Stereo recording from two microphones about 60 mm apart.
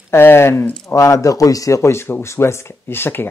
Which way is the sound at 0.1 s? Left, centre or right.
Left.